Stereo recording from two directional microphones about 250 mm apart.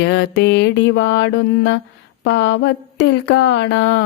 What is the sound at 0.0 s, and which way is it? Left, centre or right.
Mantra, left.